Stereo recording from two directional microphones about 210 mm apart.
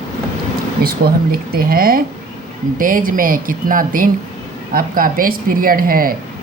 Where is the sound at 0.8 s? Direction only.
45° right (ahead or behind).